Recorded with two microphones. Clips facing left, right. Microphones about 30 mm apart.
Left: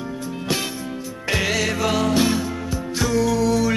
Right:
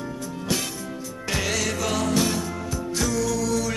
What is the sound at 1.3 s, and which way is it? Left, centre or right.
Music, left.